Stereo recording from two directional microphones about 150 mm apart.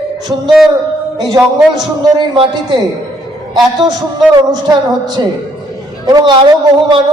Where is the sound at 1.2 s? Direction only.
30° right (ahead or behind).